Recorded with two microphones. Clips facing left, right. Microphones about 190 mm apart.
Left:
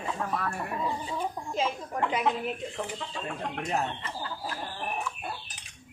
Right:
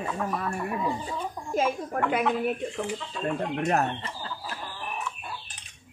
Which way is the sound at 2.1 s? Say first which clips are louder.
Right 4 dB; 55° right (ahead or behind).